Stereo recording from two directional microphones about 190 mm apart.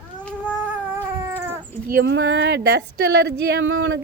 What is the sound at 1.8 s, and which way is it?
Speech, 55° right (ahead or behind).